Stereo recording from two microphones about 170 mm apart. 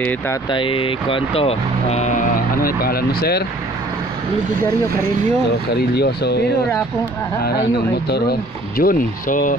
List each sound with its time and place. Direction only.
0.5 s speech: 30° left (ahead or behind); by 3.4 s 65° left (ahead or behind)
5.8 s speech: 75° left (ahead or behind)
8.1 s speech: 65° left (ahead or behind)